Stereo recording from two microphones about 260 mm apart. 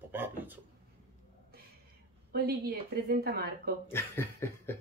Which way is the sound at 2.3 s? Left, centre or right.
Right.